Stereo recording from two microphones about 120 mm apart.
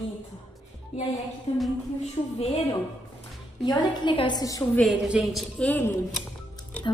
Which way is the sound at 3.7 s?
40° left (ahead or behind).